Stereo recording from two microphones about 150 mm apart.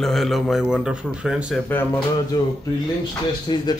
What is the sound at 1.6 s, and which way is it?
Speech, 15° left (ahead or behind).